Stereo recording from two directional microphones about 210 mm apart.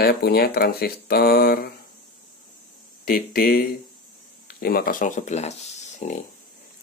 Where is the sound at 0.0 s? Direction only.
50° left (ahead or behind).